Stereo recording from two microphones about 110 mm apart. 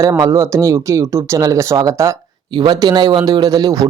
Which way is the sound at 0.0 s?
30° right (ahead or behind).